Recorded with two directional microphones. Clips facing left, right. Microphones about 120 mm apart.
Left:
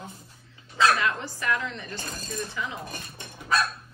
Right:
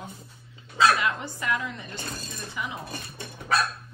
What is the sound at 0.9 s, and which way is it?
A woman's voice, 20° right (ahead or behind).